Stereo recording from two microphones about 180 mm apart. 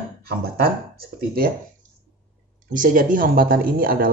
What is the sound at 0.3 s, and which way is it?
Speech, 60° right (ahead or behind).